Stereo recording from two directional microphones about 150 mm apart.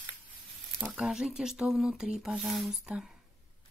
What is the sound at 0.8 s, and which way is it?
Speech, centre (ahead or behind).